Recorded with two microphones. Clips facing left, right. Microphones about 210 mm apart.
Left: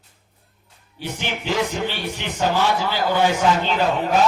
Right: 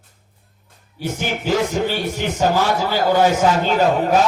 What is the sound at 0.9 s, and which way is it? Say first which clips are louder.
A man's voice: right 4 dB; 45° right (ahead or behind).